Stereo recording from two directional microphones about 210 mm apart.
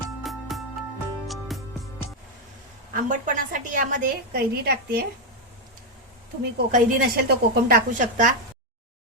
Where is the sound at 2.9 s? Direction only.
40° right (ahead or behind).